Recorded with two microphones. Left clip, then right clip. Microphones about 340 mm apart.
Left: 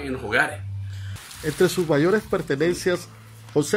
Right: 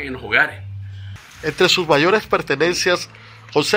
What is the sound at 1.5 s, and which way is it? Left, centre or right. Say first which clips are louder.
Speech: right 6 dB; right.